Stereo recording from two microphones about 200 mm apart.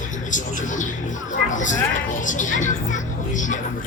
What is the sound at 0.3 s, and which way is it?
Speech, 40° left (ahead or behind).